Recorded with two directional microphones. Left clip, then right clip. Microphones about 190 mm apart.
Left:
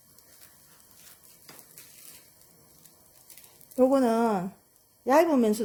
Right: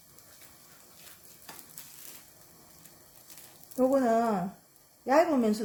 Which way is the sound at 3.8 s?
50° left (ahead or behind).